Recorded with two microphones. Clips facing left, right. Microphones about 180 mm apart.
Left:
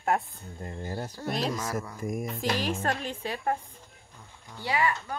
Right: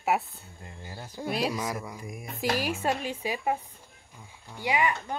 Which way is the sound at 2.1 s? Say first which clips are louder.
Left 8 dB; 45° left (ahead or behind).